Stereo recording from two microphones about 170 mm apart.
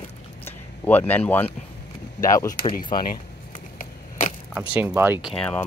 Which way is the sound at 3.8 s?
50° left (ahead or behind).